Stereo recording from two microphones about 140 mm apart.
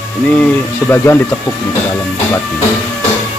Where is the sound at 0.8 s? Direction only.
20° left (ahead or behind).